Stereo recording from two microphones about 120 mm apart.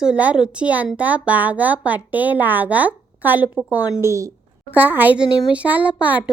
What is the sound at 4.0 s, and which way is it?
Speech, 25° right (ahead or behind).